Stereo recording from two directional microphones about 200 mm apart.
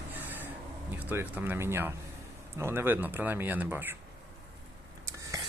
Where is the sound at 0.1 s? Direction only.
10° right (ahead or behind).